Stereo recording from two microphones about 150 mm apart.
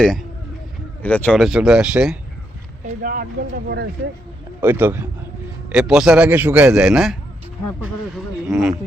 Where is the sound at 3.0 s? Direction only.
75° right (ahead or behind).